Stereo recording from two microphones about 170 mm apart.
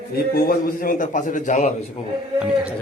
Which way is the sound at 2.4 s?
5° right (ahead or behind).